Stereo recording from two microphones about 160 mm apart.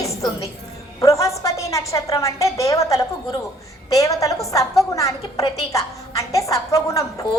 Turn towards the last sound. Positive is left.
turn(degrees=20)  # may be behind; listen again after turning